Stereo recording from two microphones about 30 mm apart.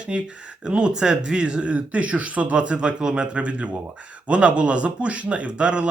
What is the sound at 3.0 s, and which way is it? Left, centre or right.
Speech, right.